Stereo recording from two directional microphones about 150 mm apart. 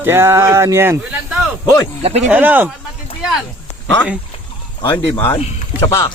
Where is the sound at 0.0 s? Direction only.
15° right (ahead or behind).